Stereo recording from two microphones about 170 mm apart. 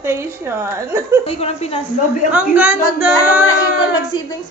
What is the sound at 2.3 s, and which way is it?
A woman's voice, 10° right (ahead or behind).